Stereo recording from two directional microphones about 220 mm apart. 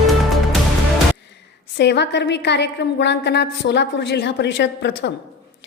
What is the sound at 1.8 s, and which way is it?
A woman's voice, 50° left (ahead or behind).